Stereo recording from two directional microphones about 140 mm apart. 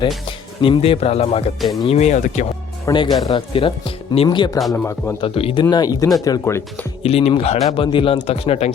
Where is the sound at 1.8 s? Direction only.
50° left (ahead or behind).